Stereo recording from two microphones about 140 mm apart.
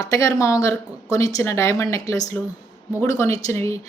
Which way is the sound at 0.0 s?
25° left (ahead or behind).